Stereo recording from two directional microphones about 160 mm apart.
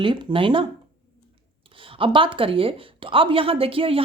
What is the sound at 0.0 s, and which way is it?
Speech, 30° right (ahead or behind).